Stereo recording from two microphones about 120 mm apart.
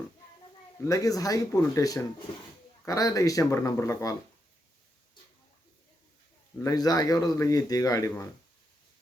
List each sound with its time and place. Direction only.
0.9 s a man's voice: 30° left (ahead or behind)
6.6 s a man's voice: 30° left (ahead or behind)